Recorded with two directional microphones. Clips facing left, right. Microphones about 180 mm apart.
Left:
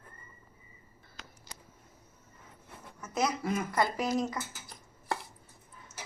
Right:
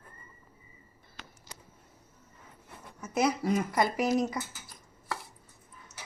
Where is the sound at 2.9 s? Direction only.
10° right (ahead or behind).